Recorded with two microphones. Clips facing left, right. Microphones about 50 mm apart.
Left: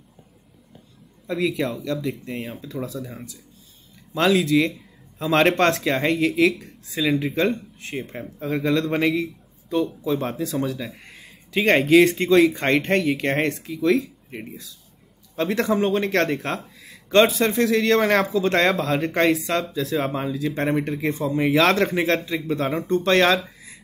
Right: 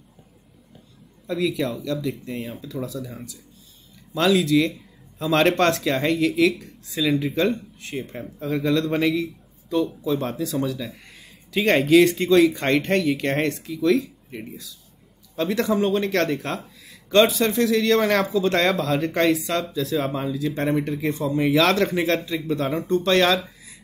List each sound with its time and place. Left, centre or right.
1.2 s a man's voice: left